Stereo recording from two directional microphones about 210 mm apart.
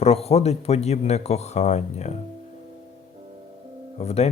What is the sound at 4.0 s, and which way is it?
Speech, 30° left (ahead or behind).